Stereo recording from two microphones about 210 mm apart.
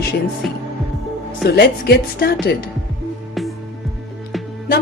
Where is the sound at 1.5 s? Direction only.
50° left (ahead or behind).